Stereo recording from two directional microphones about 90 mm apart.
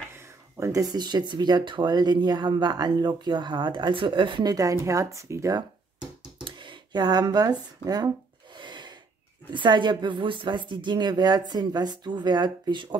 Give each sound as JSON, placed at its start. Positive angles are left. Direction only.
{"t": 0.1, "sound": "speech", "side_deg": -30}
{"t": 4.5, "sound": "speech", "side_deg": -40}
{"t": 6.4, "sound": "speech", "side_deg": -65}
{"t": 8.5, "sound": "a sound", "side_deg": -60}
{"t": 9.5, "sound": "speech", "side_deg": -60}